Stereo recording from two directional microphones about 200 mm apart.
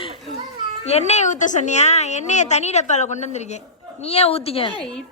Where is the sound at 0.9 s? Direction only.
30° left (ahead or behind).